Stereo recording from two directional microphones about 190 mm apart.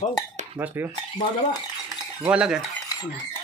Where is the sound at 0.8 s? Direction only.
10° right (ahead or behind).